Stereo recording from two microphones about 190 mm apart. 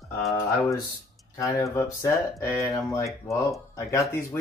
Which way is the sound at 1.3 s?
15° left (ahead or behind).